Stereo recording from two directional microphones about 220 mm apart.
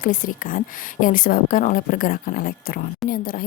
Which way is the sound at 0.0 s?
35° left (ahead or behind).